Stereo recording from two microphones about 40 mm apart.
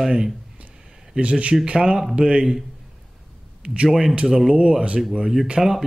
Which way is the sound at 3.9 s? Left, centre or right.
Centre.